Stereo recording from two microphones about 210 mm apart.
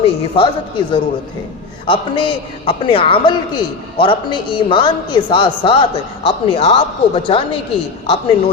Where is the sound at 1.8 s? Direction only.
25° left (ahead or behind).